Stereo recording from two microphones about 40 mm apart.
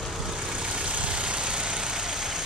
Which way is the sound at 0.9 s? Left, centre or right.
Right.